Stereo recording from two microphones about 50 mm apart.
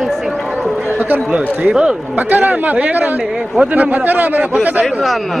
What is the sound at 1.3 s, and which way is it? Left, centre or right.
Speech, right.